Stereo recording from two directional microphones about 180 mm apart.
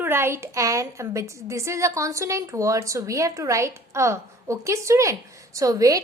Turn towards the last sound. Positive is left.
turn(degrees=-20)  # may be behind; listen again after turning